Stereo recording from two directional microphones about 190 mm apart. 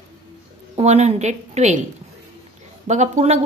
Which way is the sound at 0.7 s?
35° right (ahead or behind).